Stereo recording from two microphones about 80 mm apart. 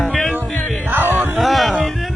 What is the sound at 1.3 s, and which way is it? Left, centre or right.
Music, centre.